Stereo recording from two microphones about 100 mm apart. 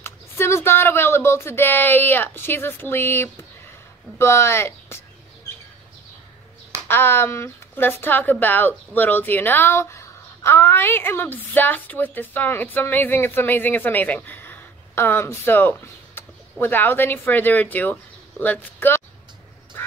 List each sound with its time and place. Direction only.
0.0 s a sound: 25° left (ahead or behind)
4.2 s speech: 25° left (ahead or behind)
6.9 s speech: 20° left (ahead or behind)